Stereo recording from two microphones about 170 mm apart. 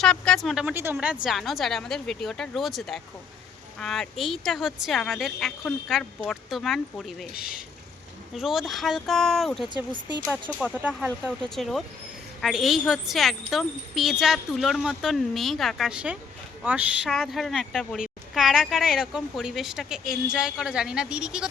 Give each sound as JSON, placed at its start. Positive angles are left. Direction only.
{"t": 0.0, "sound": "a woman's voice", "side_deg": 5}
{"t": 7.3, "sound": "speech", "side_deg": 60}
{"t": 8.4, "sound": "a woman's voice", "side_deg": 0}
{"t": 10.7, "sound": "speech", "side_deg": -10}
{"t": 11.4, "sound": "a woman's voice", "side_deg": 0}
{"t": 17.1, "sound": "a woman's voice", "side_deg": 5}